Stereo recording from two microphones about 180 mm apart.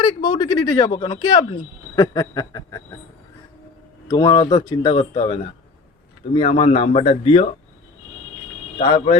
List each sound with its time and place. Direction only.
0.0 s speech: 25° left (ahead or behind)
4.1 s speech: 25° left (ahead or behind)
8.8 s speech: 30° left (ahead or behind)